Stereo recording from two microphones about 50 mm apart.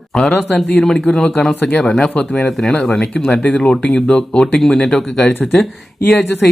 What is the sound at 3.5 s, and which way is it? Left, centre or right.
Speech, left.